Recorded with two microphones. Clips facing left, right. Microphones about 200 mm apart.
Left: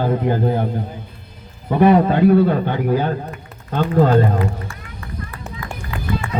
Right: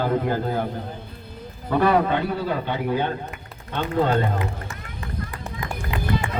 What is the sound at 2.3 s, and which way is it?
A man's voice, 55° left (ahead or behind).